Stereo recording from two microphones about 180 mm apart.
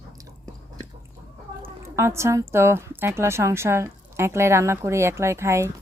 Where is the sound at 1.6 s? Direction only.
15° right (ahead or behind).